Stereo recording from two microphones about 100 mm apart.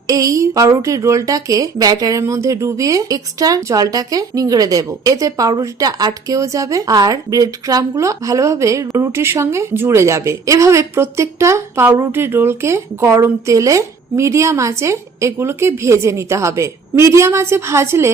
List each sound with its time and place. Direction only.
0.1 s a woman's voice: 35° right (ahead or behind)